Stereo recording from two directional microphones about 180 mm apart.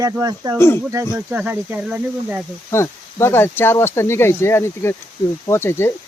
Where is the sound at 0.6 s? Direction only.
15° left (ahead or behind).